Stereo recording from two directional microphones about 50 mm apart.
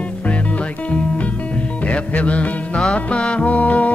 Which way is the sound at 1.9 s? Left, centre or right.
Left.